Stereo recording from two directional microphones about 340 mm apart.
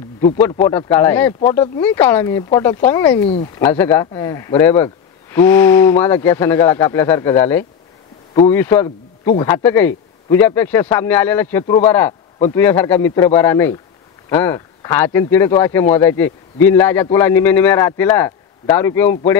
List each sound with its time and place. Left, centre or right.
0.7 s speech: centre
3.3 s speech: centre
3.6 s speech: centre